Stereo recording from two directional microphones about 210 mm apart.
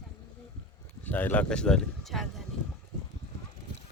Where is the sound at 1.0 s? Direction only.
10° left (ahead or behind).